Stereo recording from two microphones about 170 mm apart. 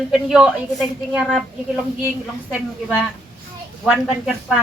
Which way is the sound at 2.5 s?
5° right (ahead or behind).